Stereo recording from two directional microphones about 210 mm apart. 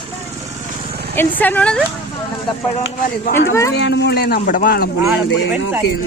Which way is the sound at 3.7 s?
55° left (ahead or behind).